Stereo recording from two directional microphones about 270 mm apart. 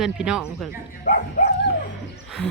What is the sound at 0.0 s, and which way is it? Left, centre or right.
Speech, centre.